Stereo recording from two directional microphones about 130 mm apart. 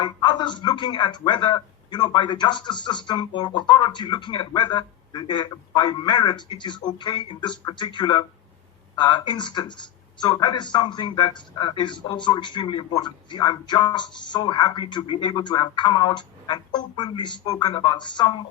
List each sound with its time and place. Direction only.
0.0 s speech: 35° left (ahead or behind)